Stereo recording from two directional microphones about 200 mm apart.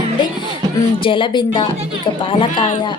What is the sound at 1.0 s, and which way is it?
A woman's voice, 25° left (ahead or behind).